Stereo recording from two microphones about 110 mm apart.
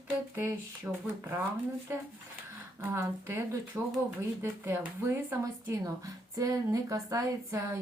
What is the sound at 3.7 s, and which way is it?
Speech, 15° right (ahead or behind).